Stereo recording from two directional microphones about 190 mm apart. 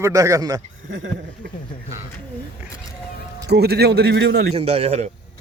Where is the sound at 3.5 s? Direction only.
60° right (ahead or behind).